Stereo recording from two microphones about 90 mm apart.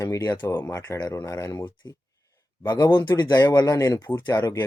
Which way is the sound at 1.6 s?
55° left (ahead or behind).